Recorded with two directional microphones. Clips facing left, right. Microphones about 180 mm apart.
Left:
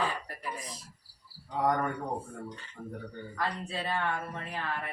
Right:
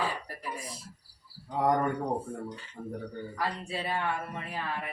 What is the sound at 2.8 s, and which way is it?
Speech, 30° right (ahead or behind).